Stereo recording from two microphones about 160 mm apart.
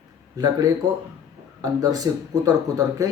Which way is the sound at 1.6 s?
25° right (ahead or behind).